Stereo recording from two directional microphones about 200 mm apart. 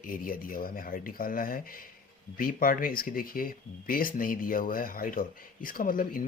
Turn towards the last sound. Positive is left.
turn(degrees=45)  # may be behind; listen again after turning